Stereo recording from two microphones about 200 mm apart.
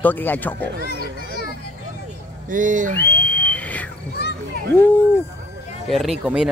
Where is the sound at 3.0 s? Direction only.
10° left (ahead or behind).